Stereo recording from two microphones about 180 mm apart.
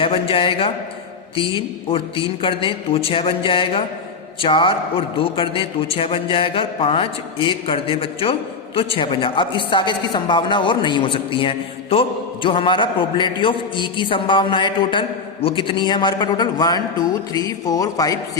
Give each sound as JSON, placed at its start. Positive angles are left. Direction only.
{"t": 0.0, "sound": "a man's voice", "side_deg": 30}